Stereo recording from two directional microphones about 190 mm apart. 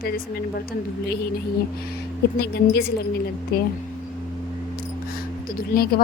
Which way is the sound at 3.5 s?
55° left (ahead or behind).